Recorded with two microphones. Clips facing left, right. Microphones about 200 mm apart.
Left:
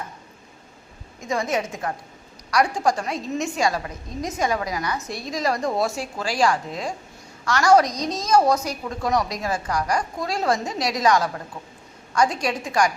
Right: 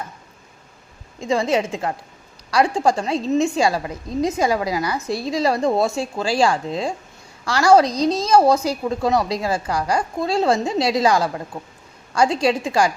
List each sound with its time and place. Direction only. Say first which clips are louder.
1.2 s a woman's voice: right 5 dB; 30° right (ahead or behind)